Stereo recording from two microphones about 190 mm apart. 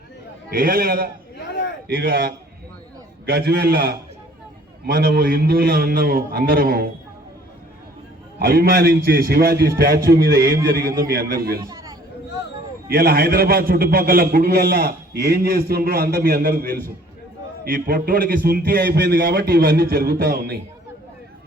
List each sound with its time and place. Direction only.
0.5 s a man's voice: 50° right (ahead or behind)
8.4 s a man's voice: 50° right (ahead or behind)
11.7 s a sound: 20° right (ahead or behind)
12.9 s a man's voice: 50° right (ahead or behind)